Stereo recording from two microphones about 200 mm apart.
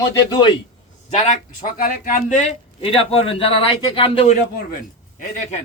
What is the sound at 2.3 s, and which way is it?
Speech, 30° left (ahead or behind).